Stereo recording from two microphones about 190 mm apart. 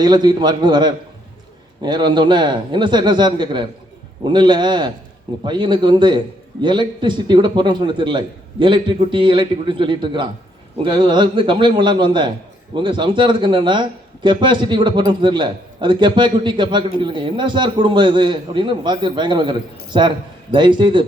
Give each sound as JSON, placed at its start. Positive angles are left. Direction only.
{"t": 0.0, "sound": "speech", "side_deg": -20}